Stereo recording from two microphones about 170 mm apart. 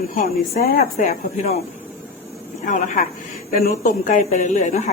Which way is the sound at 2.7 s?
50° left (ahead or behind).